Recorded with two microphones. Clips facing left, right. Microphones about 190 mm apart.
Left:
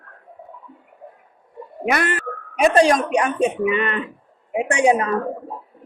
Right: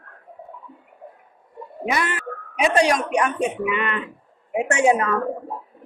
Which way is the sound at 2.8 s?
30° left (ahead or behind).